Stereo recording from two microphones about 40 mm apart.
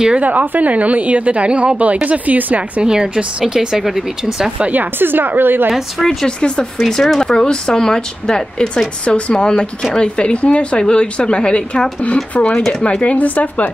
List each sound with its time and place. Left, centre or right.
0.2 s a woman's voice: right
2.8 s speech: right
3.7 s speech: centre
4.7 s a woman's voice: right
5.7 s speech: centre
6.2 s speech: left
6.9 s speech: centre; by 11.8 s left
12.3 s speech: left